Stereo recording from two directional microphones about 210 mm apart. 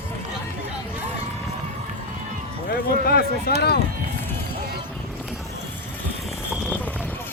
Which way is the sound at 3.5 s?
50° left (ahead or behind).